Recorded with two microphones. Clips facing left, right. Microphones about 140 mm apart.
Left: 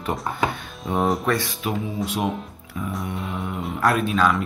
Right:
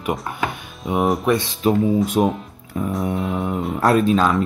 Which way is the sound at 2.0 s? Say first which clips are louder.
Right 6 dB; 45° right (ahead or behind).